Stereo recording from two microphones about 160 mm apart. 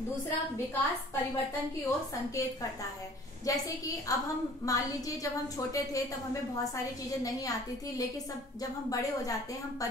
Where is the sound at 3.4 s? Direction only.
20° left (ahead or behind).